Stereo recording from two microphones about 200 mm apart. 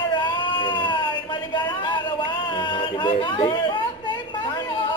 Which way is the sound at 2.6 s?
25° left (ahead or behind).